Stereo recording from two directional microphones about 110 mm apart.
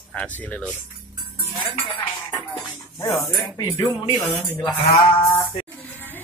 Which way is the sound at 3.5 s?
35° left (ahead or behind).